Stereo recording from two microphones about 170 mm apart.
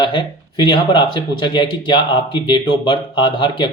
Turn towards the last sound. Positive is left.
turn(degrees=30)  # may be behind; listen again after turning